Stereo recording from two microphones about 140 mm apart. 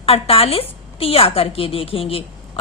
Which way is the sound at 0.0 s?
45° left (ahead or behind).